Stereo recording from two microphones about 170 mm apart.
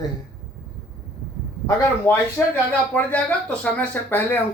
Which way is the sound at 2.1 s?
15° left (ahead or behind).